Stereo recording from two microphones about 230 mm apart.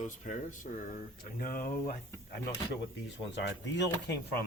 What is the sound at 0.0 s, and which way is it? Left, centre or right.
Speech, left.